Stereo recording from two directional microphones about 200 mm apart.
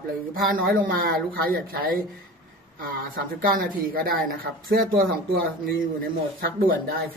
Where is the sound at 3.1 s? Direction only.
45° right (ahead or behind).